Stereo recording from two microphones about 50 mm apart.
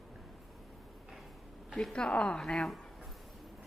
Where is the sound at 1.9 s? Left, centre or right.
Centre.